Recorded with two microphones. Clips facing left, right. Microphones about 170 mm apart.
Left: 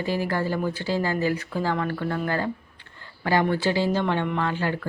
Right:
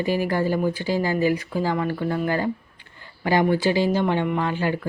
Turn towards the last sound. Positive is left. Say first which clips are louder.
# right 2 dB
turn(degrees=-15)  # may be behind; listen again after turning